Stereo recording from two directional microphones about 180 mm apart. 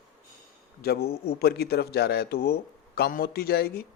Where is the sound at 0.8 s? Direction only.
60° left (ahead or behind).